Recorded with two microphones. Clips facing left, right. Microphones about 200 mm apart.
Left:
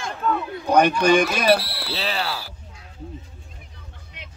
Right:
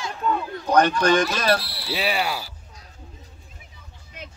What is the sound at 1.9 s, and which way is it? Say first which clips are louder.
Speech: right 3 dB; 10° right (ahead or behind).